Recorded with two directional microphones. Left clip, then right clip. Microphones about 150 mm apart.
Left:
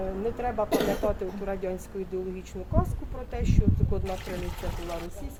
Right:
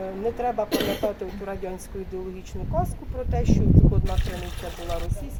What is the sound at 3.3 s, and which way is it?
Speech, 20° left (ahead or behind).